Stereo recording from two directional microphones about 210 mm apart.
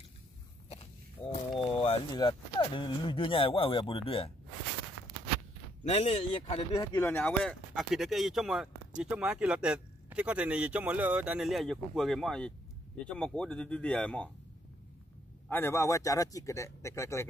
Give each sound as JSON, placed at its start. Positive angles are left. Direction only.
{"t": 1.8, "sound": "speech", "side_deg": 25}
{"t": 5.9, "sound": "speech", "side_deg": 30}
{"t": 15.4, "sound": "speech", "side_deg": 10}